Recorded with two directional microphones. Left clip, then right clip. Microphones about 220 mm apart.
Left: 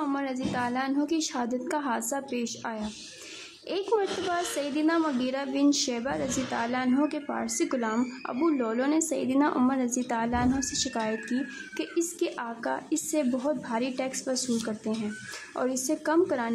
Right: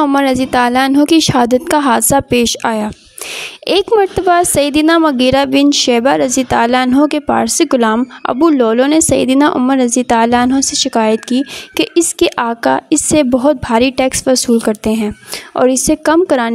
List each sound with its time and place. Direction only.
0.0 s a woman's voice: 45° right (ahead or behind)